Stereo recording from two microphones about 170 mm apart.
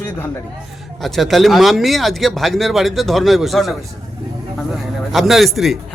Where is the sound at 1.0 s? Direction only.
Centre (ahead or behind).